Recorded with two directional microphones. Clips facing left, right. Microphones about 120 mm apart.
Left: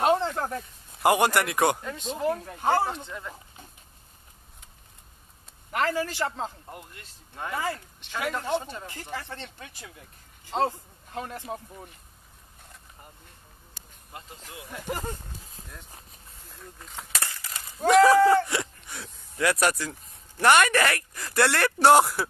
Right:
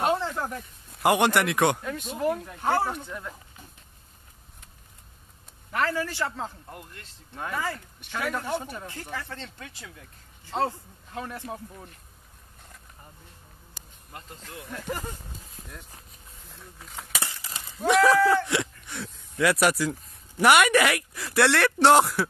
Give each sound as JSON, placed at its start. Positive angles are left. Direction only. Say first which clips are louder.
{"t": 0.0, "sound": "a sound", "louder": "left 3 dB", "side_deg": 20}
{"t": 0.9, "sound": "speech", "louder": "even", "side_deg": 0}
{"t": 2.5, "sound": "speech", "louder": "left 1 dB", "side_deg": 15}
{"t": 3.1, "sound": "speech", "louder": "right 1 dB", "side_deg": 0}
{"t": 5.7, "sound": "speech", "louder": "left 1 dB", "side_deg": 20}
{"t": 6.6, "sound": "speech", "louder": "even", "side_deg": 10}
{"t": 11.7, "sound": "speech", "louder": "left 1 dB", "side_deg": 0}
{"t": 14.1, "sound": "speech", "louder": "right 1 dB", "side_deg": 10}
{"t": 16.4, "sound": "speech", "louder": "left 2 dB", "side_deg": 0}
{"t": 17.2, "sound": "a sound", "louder": "even", "side_deg": -25}
{"t": 17.8, "sound": "speech", "louder": "left 3 dB", "side_deg": 0}